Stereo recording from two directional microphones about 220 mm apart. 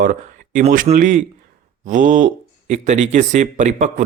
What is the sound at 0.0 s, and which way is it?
A man's voice, 35° right (ahead or behind).